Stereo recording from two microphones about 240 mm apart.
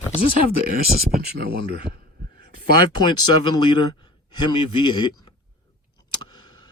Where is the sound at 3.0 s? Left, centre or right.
Centre.